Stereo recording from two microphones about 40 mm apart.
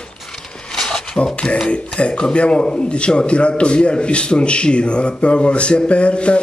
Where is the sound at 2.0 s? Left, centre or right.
Left.